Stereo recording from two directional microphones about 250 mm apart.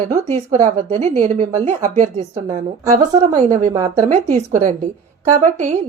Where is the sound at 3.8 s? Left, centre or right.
Right.